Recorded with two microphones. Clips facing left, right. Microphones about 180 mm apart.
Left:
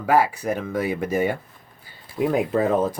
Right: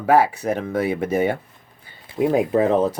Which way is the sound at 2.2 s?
45° right (ahead or behind).